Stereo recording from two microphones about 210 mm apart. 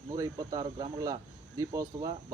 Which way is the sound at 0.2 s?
15° right (ahead or behind).